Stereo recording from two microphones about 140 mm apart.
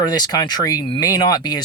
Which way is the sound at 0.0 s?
30° left (ahead or behind).